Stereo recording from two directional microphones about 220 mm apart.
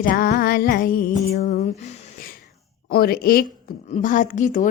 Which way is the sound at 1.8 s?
35° left (ahead or behind).